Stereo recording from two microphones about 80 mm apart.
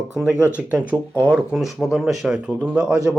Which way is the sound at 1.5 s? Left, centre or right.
Centre.